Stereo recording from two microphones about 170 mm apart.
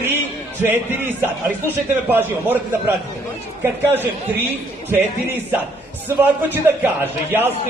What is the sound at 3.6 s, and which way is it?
Speech, 10° right (ahead or behind).